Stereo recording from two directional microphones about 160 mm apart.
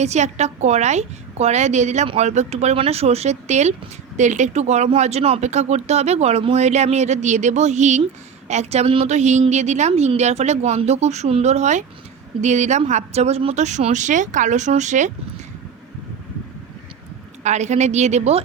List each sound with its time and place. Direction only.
0.0 s speech: 45° right (ahead or behind)
17.4 s speech: 45° right (ahead or behind)